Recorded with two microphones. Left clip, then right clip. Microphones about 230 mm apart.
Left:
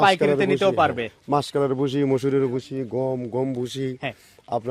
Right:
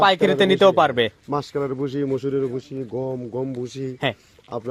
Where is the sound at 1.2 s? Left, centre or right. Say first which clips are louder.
Left 3 dB; left.